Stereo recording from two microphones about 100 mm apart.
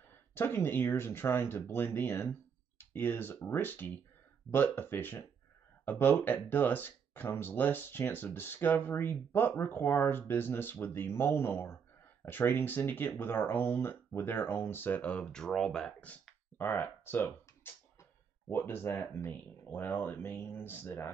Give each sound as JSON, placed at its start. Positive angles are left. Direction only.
{"t": 0.3, "sound": "speech", "side_deg": 20}